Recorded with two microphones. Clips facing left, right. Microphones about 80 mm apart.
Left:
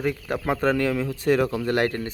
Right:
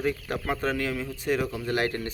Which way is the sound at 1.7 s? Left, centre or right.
Left.